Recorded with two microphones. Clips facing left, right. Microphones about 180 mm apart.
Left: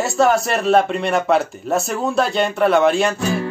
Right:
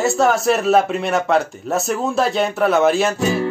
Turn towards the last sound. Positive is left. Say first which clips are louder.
# right 1 dB
turn(degrees=0)  # may be behind; listen again after turning